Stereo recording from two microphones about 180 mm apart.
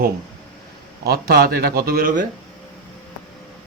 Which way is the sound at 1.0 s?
60° right (ahead or behind).